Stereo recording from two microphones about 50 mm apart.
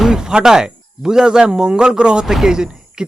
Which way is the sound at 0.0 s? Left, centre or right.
Centre.